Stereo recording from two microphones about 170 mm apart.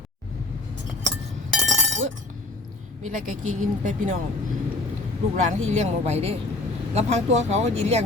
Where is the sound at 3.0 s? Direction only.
50° right (ahead or behind).